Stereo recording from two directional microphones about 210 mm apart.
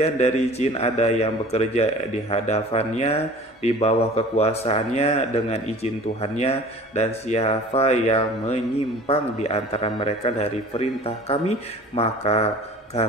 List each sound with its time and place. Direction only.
0.0 s a man's voice: 30° left (ahead or behind)